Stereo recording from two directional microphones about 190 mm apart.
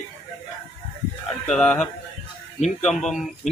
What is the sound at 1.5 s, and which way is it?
A man's voice, 5° left (ahead or behind).